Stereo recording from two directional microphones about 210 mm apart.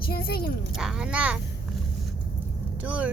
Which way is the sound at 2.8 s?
5° right (ahead or behind).